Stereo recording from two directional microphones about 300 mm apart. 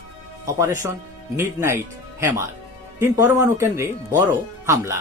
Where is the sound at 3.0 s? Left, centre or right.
Centre.